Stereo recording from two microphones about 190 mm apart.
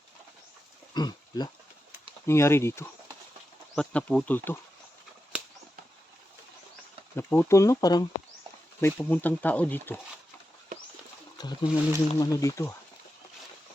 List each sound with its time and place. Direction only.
0.9 s speech: 20° left (ahead or behind); by 4.4 s 5° left (ahead or behind)
7.2 s speech: 10° left (ahead or behind)
11.3 s speech: 20° left (ahead or behind)